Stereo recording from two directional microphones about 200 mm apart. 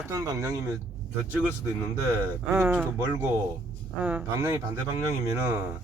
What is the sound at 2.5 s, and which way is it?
Speech, 10° right (ahead or behind).